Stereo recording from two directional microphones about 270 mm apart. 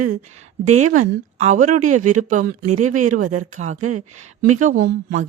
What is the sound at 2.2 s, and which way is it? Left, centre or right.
A woman's voice, right.